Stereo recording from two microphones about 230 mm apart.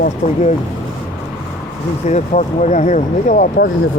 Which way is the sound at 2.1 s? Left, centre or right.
Left.